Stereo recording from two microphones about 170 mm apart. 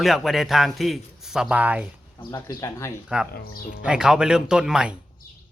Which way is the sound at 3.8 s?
5° right (ahead or behind).